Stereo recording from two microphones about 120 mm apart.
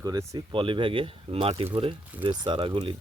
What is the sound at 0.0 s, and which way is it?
Speech, 30° right (ahead or behind).